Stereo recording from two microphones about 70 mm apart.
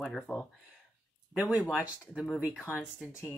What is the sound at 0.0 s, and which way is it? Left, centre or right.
Speech, centre.